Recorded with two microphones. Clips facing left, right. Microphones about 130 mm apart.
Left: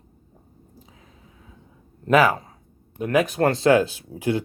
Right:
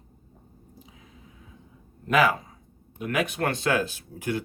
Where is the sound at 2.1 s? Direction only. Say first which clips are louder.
Left 4 dB; 40° left (ahead or behind).